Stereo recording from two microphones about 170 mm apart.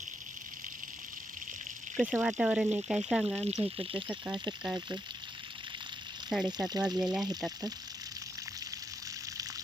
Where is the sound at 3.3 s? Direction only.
40° right (ahead or behind).